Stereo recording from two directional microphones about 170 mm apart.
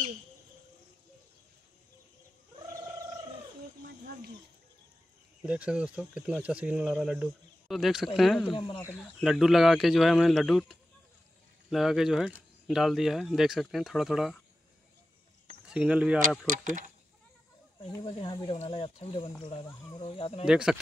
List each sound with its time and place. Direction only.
5.4 s speech: 5° right (ahead or behind)
8.5 s speech: 25° left (ahead or behind)
8.9 s speech: centre (ahead or behind)
15.7 s speech: 5° right (ahead or behind)
16.2 s speech: 50° right (ahead or behind)
17.7 s speech: 30° left (ahead or behind)
20.4 s speech: 5° right (ahead or behind)